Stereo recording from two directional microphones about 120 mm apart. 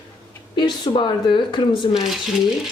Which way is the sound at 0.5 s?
35° left (ahead or behind).